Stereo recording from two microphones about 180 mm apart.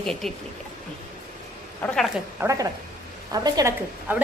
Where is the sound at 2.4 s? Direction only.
15° right (ahead or behind).